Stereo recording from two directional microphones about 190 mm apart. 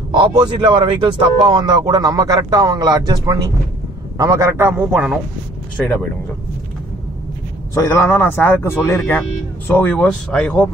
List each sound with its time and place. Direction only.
0.1 s a man's voice: 25° right (ahead or behind); by 5.2 s 5° right (ahead or behind)
7.7 s speech: 15° left (ahead or behind)